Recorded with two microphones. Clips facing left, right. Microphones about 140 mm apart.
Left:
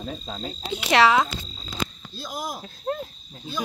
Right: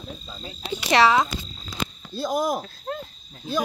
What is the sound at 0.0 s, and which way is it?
Speech, 90° left.